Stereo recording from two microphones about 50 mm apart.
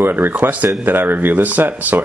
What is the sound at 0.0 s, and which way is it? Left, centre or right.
Speech, right.